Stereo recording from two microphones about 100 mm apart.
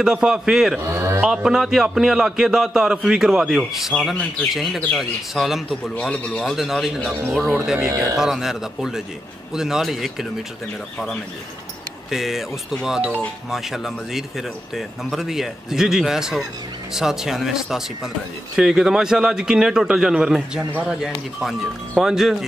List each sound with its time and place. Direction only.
0.0 s a man's voice: 5° right (ahead or behind)
0.8 s mantra: 25° right (ahead or behind)
1.2 s a man's voice: 5° right (ahead or behind)
5.9 s a man's voice: 10° left (ahead or behind); by 7.9 s 5° right (ahead or behind)
7.9 s speech: 35° right (ahead or behind)
8.2 s a man's voice: 5° right (ahead or behind)
12.1 s a man's voice: 5° right (ahead or behind)